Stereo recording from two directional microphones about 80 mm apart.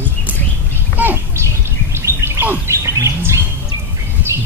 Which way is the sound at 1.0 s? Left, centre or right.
Right.